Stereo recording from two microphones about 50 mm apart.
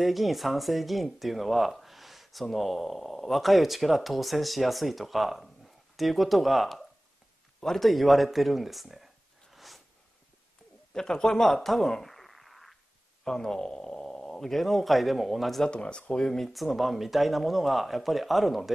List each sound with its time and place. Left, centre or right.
0.0 s speech: centre
10.9 s a man's voice: centre
15.6 s speech: centre
16.3 s speech: centre